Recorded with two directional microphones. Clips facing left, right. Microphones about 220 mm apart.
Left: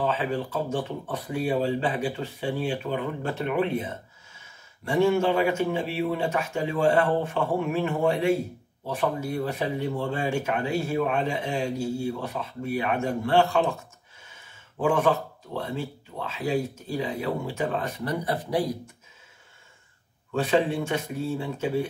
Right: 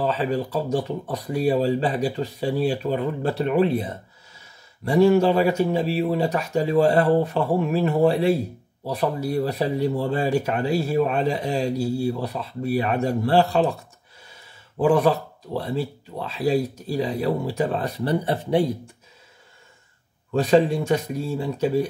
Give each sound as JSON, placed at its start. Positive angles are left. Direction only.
{"t": 0.0, "sound": "speech", "side_deg": -35}
{"t": 20.3, "sound": "speech", "side_deg": -40}